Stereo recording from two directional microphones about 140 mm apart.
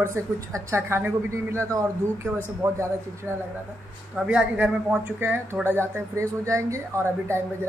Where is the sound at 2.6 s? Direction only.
20° right (ahead or behind).